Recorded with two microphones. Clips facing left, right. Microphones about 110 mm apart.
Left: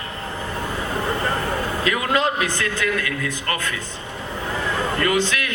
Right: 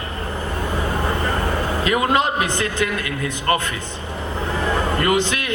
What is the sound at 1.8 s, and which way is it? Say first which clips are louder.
A man's voice: right 3 dB; 25° right (ahead or behind).